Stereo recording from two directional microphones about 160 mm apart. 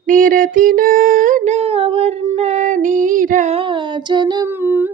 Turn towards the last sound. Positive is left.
turn(degrees=-10)  # may be behind; listen again after turning